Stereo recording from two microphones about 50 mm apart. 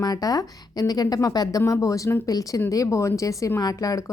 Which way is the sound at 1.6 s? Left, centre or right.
Left.